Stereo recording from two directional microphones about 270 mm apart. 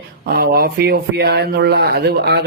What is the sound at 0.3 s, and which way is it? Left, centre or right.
Speech, right.